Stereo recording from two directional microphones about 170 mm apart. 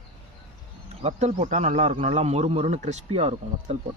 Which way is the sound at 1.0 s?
40° right (ahead or behind).